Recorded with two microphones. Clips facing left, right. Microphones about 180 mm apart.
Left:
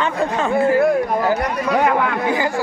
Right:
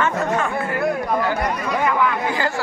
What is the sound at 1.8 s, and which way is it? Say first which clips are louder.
Speech: right 1 dB; 60° left (ahead or behind).